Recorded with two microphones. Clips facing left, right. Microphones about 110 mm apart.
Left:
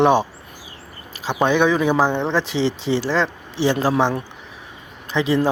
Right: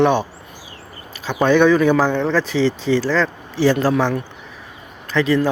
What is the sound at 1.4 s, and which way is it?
Speech, 10° left (ahead or behind).